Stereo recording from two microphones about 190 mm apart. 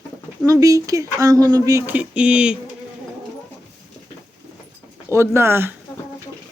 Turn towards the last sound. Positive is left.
turn(degrees=-10)  # may be behind; listen again after turning